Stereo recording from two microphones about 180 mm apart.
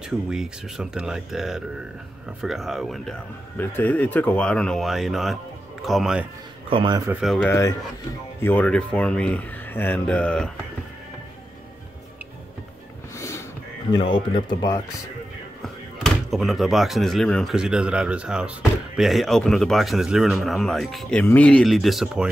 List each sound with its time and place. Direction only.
0.3 s speech: 5° right (ahead or behind)
6.7 s a man's voice: 25° right (ahead or behind)
7.1 s speech: centre (ahead or behind)
7.4 s speech: 15° left (ahead or behind)
13.1 s a sound: 15° left (ahead or behind)
13.9 s speech: 30° left (ahead or behind)
15.6 s speech: centre (ahead or behind)